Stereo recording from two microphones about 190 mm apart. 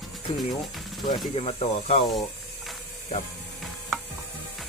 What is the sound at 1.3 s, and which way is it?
Speech, 30° left (ahead or behind).